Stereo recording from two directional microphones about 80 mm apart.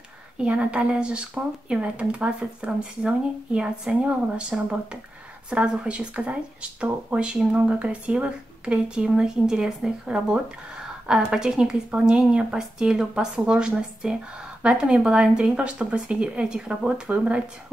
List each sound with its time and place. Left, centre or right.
0.4 s speech: centre